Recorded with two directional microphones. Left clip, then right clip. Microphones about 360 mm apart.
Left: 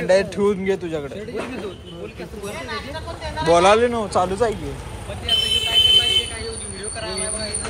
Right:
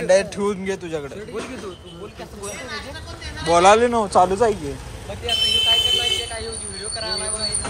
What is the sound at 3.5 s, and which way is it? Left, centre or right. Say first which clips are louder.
Speech: right 1 dB; centre.